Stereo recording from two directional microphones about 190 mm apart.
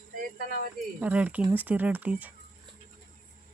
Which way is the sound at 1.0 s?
5° right (ahead or behind).